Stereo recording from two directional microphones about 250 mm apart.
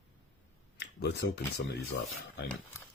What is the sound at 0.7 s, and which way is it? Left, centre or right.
Speech, left.